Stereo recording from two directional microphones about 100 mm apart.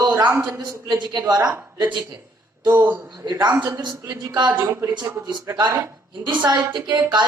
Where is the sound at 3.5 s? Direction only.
20° right (ahead or behind).